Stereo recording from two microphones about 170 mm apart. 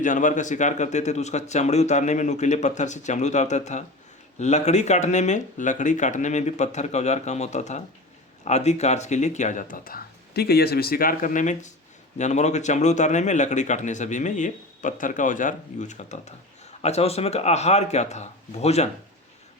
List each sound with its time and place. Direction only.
0.0 s a man's voice: 50° left (ahead or behind)